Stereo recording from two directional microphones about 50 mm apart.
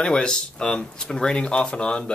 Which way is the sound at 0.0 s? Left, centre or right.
Centre.